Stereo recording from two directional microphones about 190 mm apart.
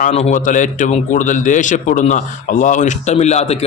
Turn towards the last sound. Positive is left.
turn(degrees=35)  # may be behind; listen again after turning